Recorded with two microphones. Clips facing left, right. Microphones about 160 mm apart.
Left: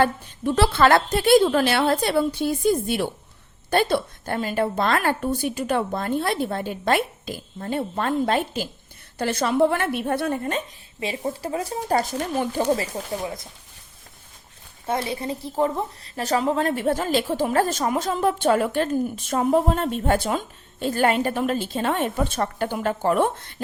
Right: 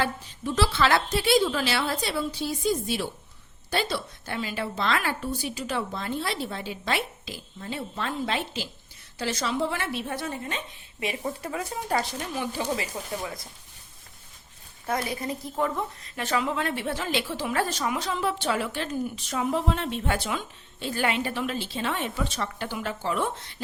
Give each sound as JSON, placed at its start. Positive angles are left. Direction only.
{"t": 0.0, "sound": "a woman's voice", "side_deg": 55}
{"t": 11.3, "sound": "speech", "side_deg": 30}
{"t": 13.2, "sound": "speech", "side_deg": 25}
{"t": 14.8, "sound": "speech", "side_deg": 25}